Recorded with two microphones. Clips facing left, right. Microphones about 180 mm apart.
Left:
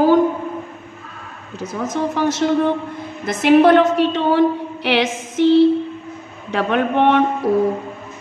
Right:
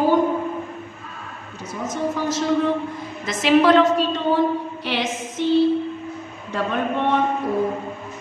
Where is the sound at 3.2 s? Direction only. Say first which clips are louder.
Left 4 dB; 55° left (ahead or behind); by 5.5 s 85° left.